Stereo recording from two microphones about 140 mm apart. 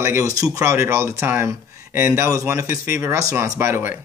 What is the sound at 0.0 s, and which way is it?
Speech, 20° right (ahead or behind).